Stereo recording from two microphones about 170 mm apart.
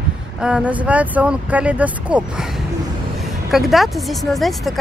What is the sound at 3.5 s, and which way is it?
Speech, centre (ahead or behind).